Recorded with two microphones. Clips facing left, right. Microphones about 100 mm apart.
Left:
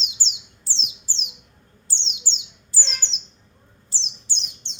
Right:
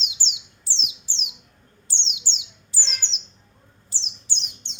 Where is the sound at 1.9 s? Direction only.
35° left (ahead or behind).